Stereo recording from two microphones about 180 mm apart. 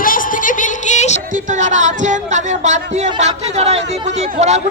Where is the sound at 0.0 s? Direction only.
50° left (ahead or behind).